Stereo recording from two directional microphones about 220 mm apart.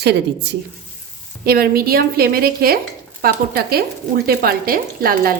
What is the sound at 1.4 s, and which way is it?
A woman's voice, 40° right (ahead or behind).